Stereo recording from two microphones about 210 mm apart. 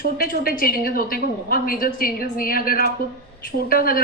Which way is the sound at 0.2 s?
45° left (ahead or behind).